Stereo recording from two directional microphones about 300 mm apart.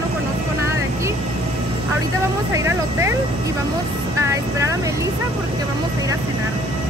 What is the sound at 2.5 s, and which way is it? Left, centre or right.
Vehicle, centre.